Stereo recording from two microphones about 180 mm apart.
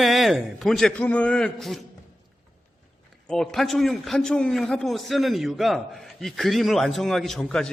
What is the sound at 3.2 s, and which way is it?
A man's voice, centre (ahead or behind).